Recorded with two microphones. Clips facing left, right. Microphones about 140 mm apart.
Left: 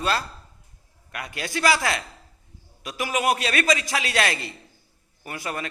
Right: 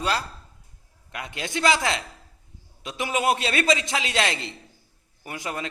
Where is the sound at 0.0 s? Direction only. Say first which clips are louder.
Left 1 dB; 15° right (ahead or behind).